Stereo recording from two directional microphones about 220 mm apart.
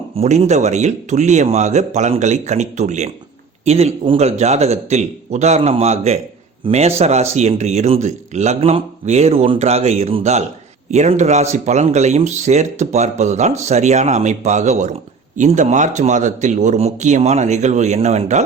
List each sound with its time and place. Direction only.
0.2 s speech: 30° right (ahead or behind)